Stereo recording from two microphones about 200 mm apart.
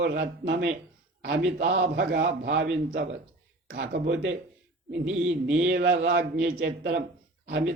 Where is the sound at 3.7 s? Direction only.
60° right (ahead or behind).